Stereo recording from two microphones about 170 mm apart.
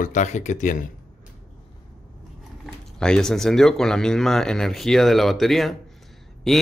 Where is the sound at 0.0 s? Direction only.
45° left (ahead or behind).